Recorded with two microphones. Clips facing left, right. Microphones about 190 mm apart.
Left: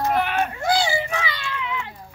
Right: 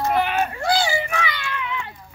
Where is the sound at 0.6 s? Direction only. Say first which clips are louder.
Left 1 dB; 20° left (ahead or behind).